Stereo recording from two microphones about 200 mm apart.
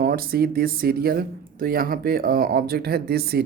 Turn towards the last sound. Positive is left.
turn(degrees=-50)  # may be behind; listen again after turning